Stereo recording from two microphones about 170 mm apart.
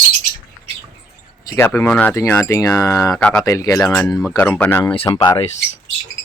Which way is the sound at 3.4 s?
20° left (ahead or behind).